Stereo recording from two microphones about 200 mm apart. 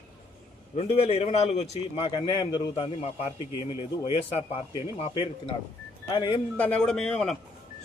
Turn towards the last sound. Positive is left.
turn(degrees=0)  # may be behind; listen again after turning